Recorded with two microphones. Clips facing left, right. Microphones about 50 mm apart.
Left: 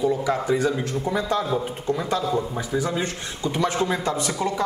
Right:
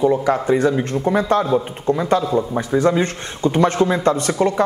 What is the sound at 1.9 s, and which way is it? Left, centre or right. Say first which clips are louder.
Speech: right 7 dB; right.